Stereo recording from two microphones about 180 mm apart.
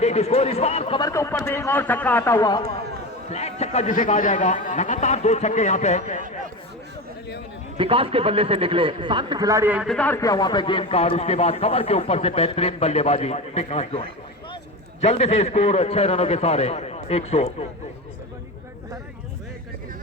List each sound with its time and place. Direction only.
0.0 s a man's voice: 35° left (ahead or behind)
1.0 s a man's voice: 15° left (ahead or behind)
3.2 s a man's voice: 35° left (ahead or behind)
7.8 s a man's voice: 30° right (ahead or behind); by 9.9 s 10° right (ahead or behind)
9.9 s a man's voice: 10° left (ahead or behind); by 17.5 s 35° left (ahead or behind)